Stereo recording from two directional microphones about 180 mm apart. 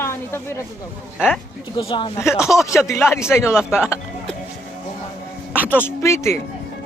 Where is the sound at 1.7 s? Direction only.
30° left (ahead or behind).